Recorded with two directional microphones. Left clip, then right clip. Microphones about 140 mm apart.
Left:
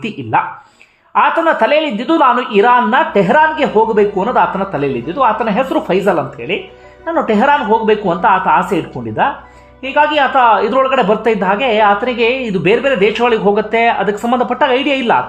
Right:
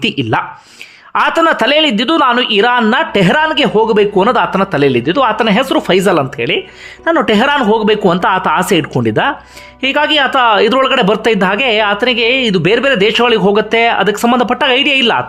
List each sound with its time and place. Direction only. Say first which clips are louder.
1.1 s speech: right 1 dB; 30° right (ahead or behind)
11.2 s speech: right 2 dB; 25° right (ahead or behind)
14.7 s a woman's voice: right 4 dB; 10° right (ahead or behind)